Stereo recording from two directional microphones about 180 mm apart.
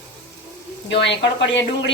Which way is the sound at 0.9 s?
80° left.